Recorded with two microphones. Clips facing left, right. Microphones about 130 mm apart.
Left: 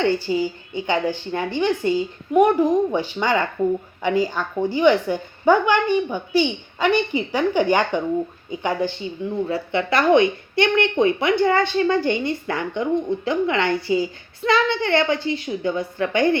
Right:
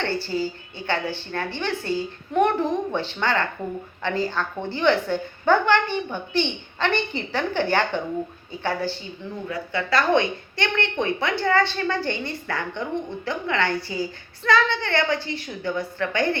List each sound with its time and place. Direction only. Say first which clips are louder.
0.0 s a woman's voice: left 5 dB; 15° left (ahead or behind)